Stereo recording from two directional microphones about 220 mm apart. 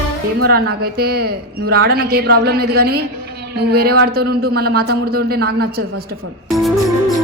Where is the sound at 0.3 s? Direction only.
45° right (ahead or behind).